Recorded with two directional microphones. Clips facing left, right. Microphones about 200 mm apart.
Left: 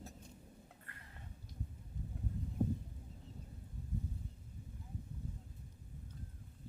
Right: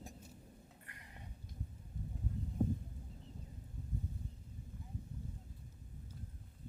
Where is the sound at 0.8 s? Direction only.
15° right (ahead or behind).